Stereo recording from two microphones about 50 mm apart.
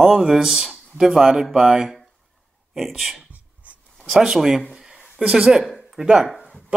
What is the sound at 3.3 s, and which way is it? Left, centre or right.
Writing, right.